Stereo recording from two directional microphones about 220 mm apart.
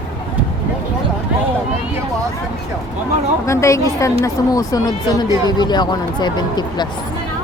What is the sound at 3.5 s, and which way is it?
A woman's voice, 15° left (ahead or behind).